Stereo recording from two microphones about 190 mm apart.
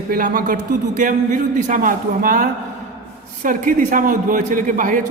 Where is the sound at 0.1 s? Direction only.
50° right (ahead or behind).